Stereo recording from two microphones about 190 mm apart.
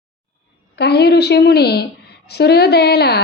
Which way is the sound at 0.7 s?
60° left (ahead or behind).